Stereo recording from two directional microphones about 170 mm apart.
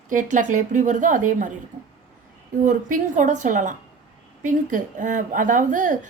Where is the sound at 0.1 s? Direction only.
50° right (ahead or behind).